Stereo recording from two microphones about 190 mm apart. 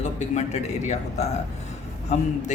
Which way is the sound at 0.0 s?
40° left (ahead or behind).